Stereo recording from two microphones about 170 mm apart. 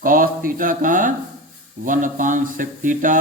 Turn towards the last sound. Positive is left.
turn(degrees=-50)  # may be behind; listen again after turning